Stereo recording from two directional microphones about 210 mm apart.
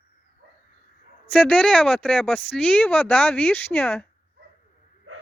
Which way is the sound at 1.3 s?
5° left (ahead or behind).